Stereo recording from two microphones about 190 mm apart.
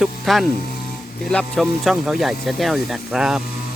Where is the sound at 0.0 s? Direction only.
Centre (ahead or behind).